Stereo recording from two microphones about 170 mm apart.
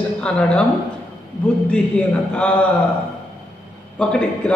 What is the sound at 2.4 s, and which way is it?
Speech, 5° left (ahead or behind).